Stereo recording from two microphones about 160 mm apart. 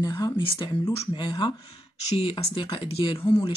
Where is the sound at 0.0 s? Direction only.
25° left (ahead or behind).